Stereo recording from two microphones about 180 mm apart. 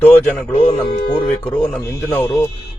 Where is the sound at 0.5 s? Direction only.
35° left (ahead or behind).